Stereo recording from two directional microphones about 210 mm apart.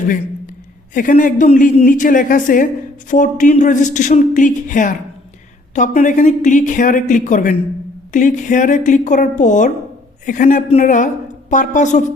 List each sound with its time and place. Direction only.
0.9 s speech: 40° left (ahead or behind)